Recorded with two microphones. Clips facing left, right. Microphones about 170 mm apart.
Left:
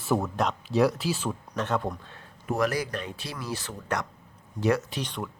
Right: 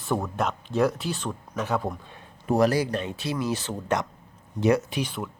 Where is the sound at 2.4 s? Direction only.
30° right (ahead or behind).